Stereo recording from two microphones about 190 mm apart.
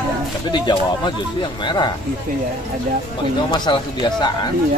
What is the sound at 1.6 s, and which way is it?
Speech, 25° left (ahead or behind).